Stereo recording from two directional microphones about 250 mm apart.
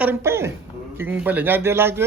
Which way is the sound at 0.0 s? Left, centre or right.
Centre.